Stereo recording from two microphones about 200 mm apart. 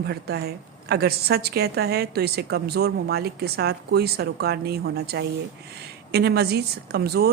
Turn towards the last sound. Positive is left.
turn(degrees=-55)  # may be behind; listen again after turning